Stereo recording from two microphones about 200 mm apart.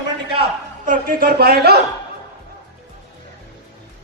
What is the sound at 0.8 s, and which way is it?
Speech, 45° right (ahead or behind).